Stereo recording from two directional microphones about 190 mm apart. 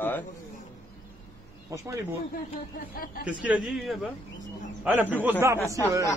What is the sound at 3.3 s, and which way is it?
Speech, 5° right (ahead or behind).